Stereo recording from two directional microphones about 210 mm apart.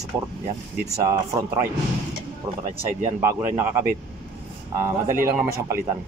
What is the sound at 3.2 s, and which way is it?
Speech, 10° right (ahead or behind).